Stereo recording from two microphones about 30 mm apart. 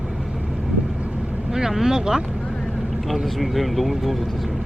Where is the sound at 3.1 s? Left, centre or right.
Centre.